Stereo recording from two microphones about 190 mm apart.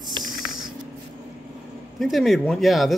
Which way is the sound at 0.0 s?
20° right (ahead or behind).